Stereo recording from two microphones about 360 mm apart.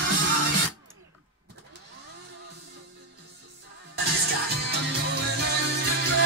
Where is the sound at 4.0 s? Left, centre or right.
Right.